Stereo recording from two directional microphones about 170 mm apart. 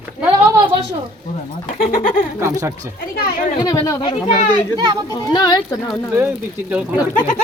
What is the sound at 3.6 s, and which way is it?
Speech, 25° left (ahead or behind).